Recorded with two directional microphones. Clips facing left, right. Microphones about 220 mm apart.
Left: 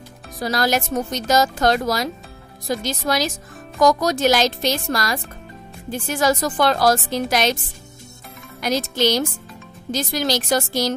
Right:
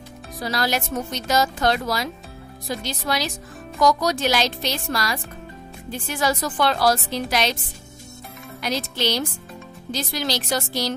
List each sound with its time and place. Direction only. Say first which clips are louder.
0.4 s speech: left 4 dB; 45° left (ahead or behind)
8.5 s speech: left 5 dB; 45° left (ahead or behind)